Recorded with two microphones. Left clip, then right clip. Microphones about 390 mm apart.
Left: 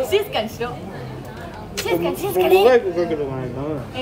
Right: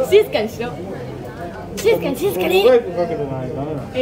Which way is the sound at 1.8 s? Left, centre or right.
Centre.